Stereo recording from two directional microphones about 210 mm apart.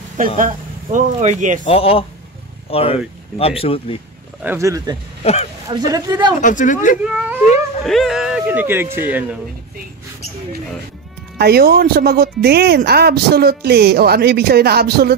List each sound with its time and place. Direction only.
0.4 s a man's voice: 35° right (ahead or behind)
1.6 s speech: 25° left (ahead or behind)
4.4 s speech: 10° right (ahead or behind)
5.2 s speech: 30° left (ahead or behind)
5.7 s speech: 15° right (ahead or behind)
6.4 s speech: 40° left (ahead or behind)
7.1 s speech: 5° right (ahead or behind)
11.3 s speech: 50° right (ahead or behind)